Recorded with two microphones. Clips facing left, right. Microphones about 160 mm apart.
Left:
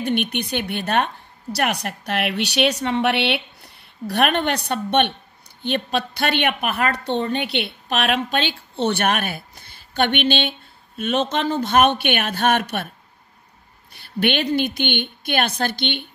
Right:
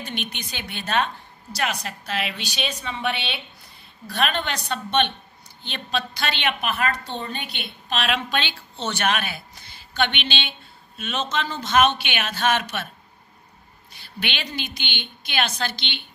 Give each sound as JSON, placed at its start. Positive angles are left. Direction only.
{"t": 0.0, "sound": "a woman's voice", "side_deg": 60}
{"t": 13.9, "sound": "a woman's voice", "side_deg": 55}